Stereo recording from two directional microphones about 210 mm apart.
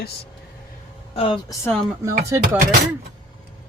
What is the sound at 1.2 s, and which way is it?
Speech, 25° left (ahead or behind).